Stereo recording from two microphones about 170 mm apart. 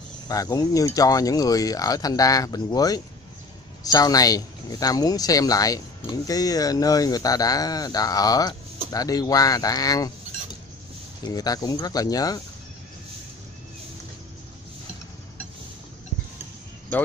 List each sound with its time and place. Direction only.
0.3 s speech: 20° left (ahead or behind)
11.2 s speech: 20° left (ahead or behind)